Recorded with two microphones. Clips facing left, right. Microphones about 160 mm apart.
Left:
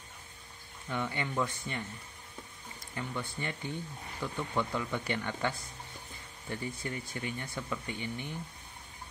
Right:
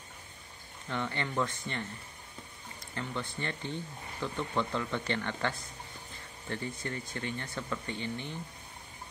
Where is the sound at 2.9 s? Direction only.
10° left (ahead or behind).